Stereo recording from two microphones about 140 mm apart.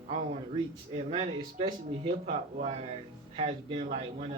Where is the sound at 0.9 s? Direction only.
45° right (ahead or behind).